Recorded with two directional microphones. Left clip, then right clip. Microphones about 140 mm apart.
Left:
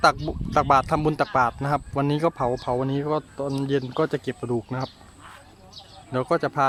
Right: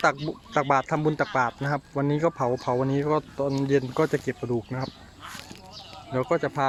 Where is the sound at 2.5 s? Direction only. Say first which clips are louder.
Even; 10° left (ahead or behind).